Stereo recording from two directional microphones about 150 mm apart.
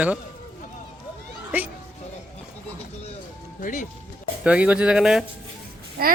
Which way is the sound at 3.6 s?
60° left (ahead or behind).